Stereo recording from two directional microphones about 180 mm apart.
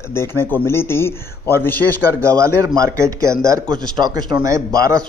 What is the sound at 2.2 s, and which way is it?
Speech, 15° right (ahead or behind).